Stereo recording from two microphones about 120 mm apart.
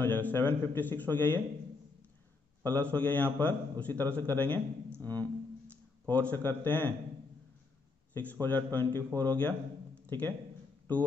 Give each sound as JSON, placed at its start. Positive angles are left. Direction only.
{"t": 0.0, "sound": "a man's voice", "side_deg": 15}
{"t": 2.6, "sound": "a man's voice", "side_deg": 10}
{"t": 8.1, "sound": "a man's voice", "side_deg": 15}